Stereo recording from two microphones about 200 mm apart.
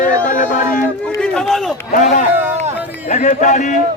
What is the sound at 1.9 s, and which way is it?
Speech, 40° left (ahead or behind).